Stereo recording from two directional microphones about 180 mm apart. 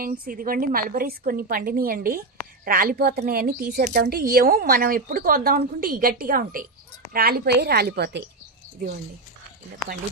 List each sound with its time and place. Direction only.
0.0 s a woman's voice: 55° right (ahead or behind)